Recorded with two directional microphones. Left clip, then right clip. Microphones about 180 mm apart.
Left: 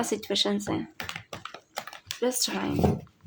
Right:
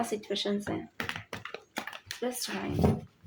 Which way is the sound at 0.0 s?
40° left (ahead or behind).